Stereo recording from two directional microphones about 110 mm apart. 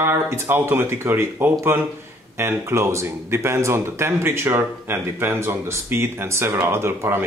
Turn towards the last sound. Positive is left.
turn(degrees=-20)  # may be behind; listen again after turning